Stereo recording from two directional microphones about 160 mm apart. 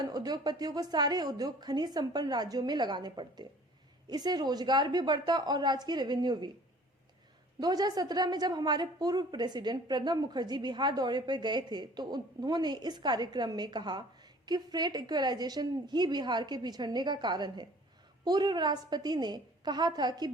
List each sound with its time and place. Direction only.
0.0 s a woman's voice: 25° right (ahead or behind)
7.6 s a woman's voice: 25° right (ahead or behind)